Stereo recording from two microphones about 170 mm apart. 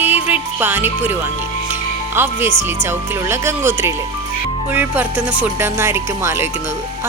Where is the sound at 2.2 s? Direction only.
15° right (ahead or behind).